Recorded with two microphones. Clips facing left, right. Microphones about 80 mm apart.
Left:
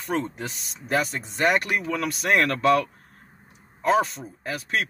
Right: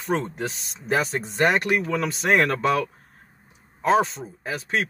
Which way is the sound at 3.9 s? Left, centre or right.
Centre.